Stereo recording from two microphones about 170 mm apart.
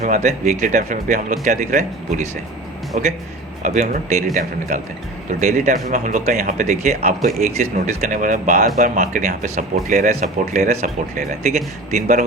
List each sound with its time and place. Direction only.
0.0 s speech: 45° right (ahead or behind)
5.4 s speech: 45° right (ahead or behind)